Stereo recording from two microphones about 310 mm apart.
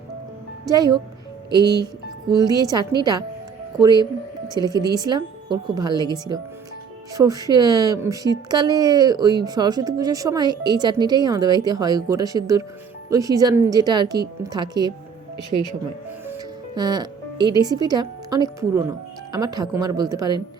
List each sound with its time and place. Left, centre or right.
0.7 s speech: centre
2.2 s speech: centre
16.2 s speech: centre